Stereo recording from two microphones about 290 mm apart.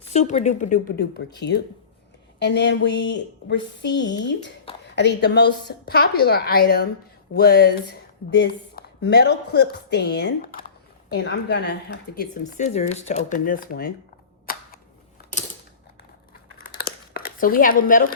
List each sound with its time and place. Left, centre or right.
0.1 s speech: left
2.4 s speech: left
14.5 s a sound: left
16.7 s crumpling: left